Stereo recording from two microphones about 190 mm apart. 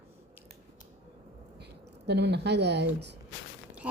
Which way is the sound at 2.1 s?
60° right (ahead or behind).